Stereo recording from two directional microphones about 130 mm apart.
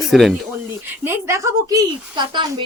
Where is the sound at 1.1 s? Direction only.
20° right (ahead or behind).